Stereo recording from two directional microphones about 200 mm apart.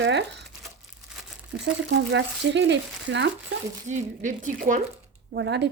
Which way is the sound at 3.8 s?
40° right (ahead or behind).